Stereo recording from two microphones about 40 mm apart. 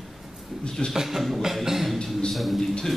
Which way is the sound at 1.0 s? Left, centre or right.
Centre.